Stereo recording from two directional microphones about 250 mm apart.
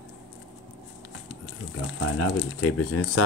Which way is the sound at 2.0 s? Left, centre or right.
Left.